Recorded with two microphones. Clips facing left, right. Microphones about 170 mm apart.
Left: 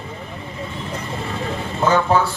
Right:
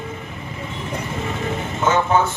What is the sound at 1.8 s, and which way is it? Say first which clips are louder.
Speech: left 1 dB; 35° left (ahead or behind).